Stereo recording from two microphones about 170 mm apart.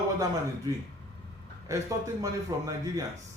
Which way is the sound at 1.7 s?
20° right (ahead or behind).